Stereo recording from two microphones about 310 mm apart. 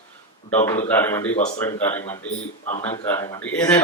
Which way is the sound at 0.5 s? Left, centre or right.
Centre.